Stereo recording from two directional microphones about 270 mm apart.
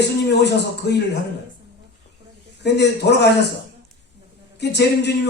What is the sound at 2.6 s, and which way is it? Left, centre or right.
Speech, left.